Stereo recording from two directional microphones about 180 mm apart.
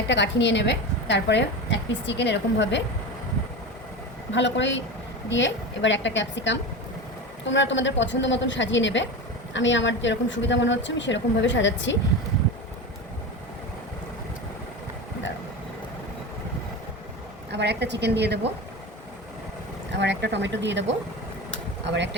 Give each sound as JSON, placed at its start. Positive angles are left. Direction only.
{"t": 0.1, "sound": "a woman's voice", "side_deg": 75}
{"t": 4.3, "sound": "a woman's voice", "side_deg": 85}
{"t": 17.5, "sound": "a woman's voice", "side_deg": -70}
{"t": 19.9, "sound": "a woman's voice", "side_deg": -75}